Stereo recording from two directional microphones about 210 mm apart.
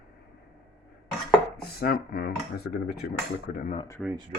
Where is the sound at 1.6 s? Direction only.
45° left (ahead or behind).